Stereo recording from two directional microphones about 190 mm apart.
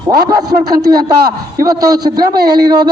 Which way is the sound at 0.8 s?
20° right (ahead or behind).